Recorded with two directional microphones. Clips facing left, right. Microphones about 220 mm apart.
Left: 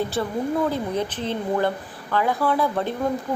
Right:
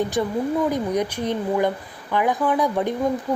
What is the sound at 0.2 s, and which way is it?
Speech, 15° right (ahead or behind).